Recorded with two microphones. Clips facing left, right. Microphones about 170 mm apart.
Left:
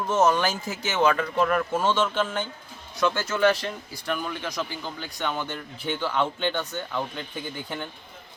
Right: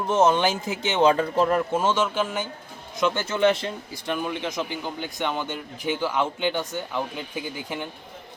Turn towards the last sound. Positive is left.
turn(degrees=-10)  # may be behind; listen again after turning